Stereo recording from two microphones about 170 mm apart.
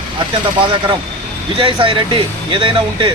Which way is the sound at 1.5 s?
30° right (ahead or behind).